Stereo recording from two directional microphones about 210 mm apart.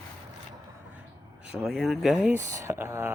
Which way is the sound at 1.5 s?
Centre (ahead or behind).